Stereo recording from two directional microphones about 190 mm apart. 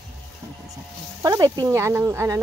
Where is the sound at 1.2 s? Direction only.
20° right (ahead or behind).